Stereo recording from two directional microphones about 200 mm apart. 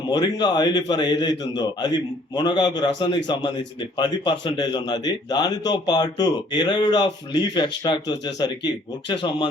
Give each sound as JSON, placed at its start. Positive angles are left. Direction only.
{"t": 0.1, "sound": "a man's voice", "side_deg": 20}